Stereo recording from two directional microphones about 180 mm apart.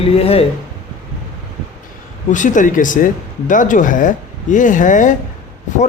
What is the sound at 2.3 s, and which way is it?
Speech, 45° left (ahead or behind).